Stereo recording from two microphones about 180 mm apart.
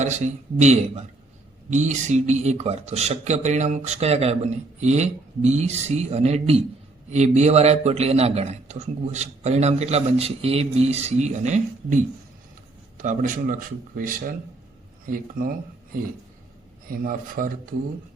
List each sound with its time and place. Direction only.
0.6 s a man's voice: 40° right (ahead or behind)